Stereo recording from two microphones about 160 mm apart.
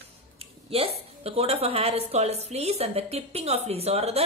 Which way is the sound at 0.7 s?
40° right (ahead or behind).